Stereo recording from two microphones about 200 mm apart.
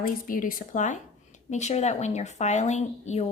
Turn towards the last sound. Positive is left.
turn(degrees=35)  # may be behind; listen again after turning